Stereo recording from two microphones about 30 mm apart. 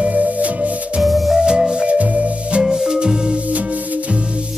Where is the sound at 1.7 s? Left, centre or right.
Right.